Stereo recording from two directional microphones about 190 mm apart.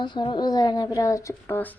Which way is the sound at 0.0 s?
25° left (ahead or behind).